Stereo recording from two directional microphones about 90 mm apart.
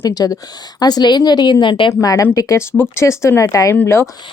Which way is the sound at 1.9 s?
40° left (ahead or behind).